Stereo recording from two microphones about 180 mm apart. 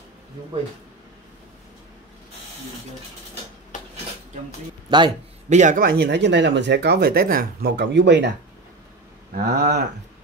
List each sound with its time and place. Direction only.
4.9 s a man's voice: 25° right (ahead or behind)
5.5 s speech: 45° right (ahead or behind); by 8.3 s 75° right (ahead or behind)
9.3 s speech: 60° right (ahead or behind)